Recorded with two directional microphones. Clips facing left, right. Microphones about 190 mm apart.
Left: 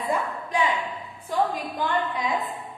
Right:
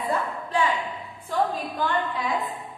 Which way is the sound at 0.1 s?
15° left (ahead or behind).